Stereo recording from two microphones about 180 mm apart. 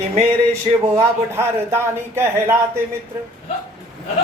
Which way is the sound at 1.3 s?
15° right (ahead or behind).